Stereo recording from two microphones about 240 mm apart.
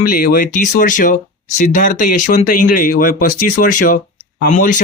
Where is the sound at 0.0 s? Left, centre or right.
Left.